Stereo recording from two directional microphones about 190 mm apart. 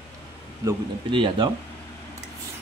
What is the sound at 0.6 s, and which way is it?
Speech, 25° right (ahead or behind).